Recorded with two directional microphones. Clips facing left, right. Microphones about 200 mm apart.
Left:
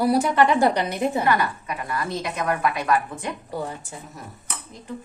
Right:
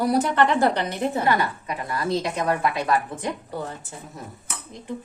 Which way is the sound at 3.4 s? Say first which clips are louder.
Left 2 dB; 10° left (ahead or behind).